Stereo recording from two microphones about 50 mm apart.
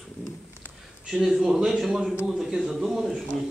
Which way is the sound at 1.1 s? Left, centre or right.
Centre.